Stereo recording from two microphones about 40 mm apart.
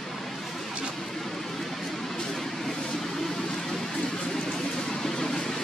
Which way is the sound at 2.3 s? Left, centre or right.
Centre.